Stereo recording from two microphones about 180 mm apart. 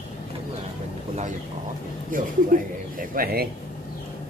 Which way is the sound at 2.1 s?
50° right (ahead or behind).